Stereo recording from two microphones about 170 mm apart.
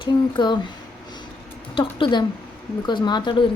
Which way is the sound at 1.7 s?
30° left (ahead or behind).